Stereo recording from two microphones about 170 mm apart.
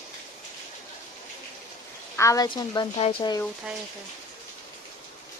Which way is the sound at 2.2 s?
20° left (ahead or behind).